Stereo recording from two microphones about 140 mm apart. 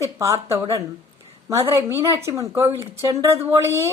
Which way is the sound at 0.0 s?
20° right (ahead or behind).